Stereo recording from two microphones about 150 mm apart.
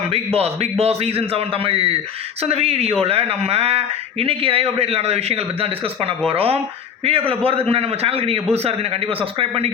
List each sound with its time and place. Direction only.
0.1 s speech: 40° right (ahead or behind)